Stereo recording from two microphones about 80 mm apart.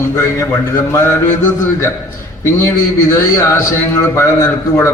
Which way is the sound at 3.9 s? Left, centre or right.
Left.